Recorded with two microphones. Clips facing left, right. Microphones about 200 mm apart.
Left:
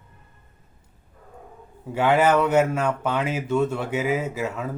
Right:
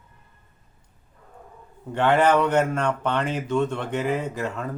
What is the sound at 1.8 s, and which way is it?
Speech, 5° left (ahead or behind).